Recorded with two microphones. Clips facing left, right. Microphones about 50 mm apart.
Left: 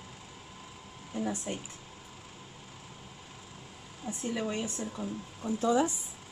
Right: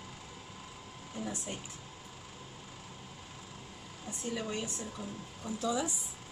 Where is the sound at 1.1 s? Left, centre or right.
Left.